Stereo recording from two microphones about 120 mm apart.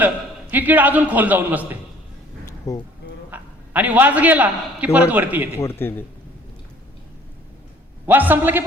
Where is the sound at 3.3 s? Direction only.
15° right (ahead or behind).